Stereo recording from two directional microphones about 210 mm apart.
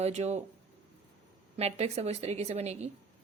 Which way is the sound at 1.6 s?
30° right (ahead or behind).